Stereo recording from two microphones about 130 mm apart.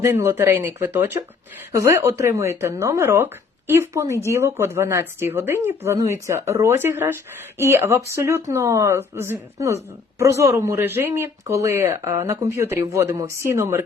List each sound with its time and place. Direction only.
0.0 s speech: 20° right (ahead or behind)